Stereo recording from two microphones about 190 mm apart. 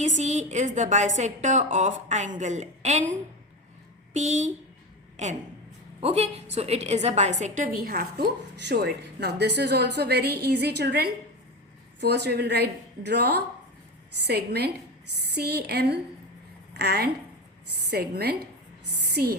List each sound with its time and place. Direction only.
0.0 s a woman's voice: 40° right (ahead or behind)
4.1 s a woman's voice: 40° right (ahead or behind)
7.8 s a woman's voice: 50° right (ahead or behind)
14.3 s a woman's voice: 60° right (ahead or behind)